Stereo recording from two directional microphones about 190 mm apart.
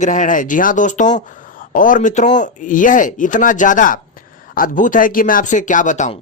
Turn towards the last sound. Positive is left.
turn(degrees=40)  # may be behind; listen again after turning